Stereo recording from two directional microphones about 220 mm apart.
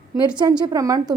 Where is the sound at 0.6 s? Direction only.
15° right (ahead or behind).